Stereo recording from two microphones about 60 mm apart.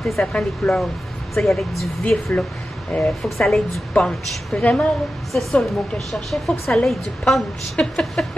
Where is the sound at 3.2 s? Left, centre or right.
Centre.